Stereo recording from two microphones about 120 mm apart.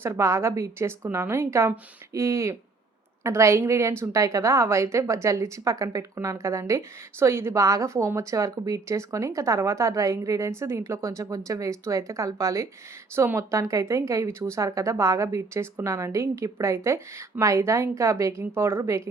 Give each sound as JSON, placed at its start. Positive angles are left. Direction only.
{"t": 0.0, "sound": "a woman's voice", "side_deg": -20}